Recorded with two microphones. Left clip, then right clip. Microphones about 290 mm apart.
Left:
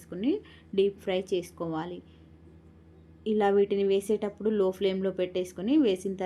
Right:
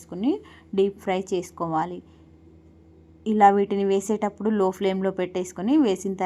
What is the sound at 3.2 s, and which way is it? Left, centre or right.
A woman's voice, centre.